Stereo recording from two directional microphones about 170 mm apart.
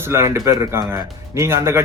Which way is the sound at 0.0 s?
15° right (ahead or behind).